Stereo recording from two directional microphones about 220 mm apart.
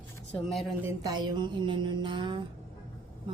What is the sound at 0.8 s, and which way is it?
Mantra, 15° right (ahead or behind).